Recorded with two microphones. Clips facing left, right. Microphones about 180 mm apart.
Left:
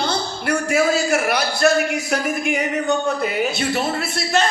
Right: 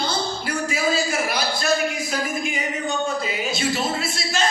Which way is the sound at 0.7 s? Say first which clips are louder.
Left 6 dB; 65° left (ahead or behind).